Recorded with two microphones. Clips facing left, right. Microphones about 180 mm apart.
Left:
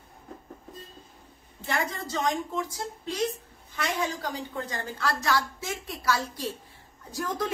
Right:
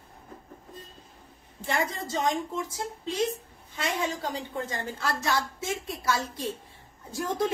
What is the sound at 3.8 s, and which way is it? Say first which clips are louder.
Speech: even; 20° right (ahead or behind).